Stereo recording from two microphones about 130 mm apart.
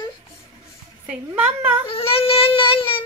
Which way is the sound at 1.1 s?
10° right (ahead or behind).